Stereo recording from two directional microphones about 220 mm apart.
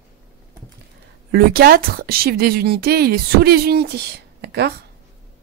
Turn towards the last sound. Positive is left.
turn(degrees=-50)  # may be behind; listen again after turning